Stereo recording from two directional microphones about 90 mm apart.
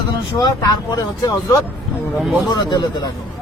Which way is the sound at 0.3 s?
45° left (ahead or behind).